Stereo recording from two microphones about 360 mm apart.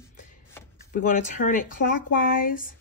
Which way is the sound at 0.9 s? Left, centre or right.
Left.